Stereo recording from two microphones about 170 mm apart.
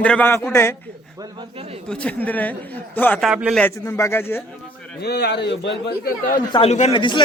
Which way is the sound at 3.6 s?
15° left (ahead or behind).